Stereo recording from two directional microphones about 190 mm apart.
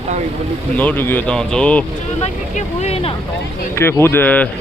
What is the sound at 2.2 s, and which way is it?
Speech, 35° left (ahead or behind).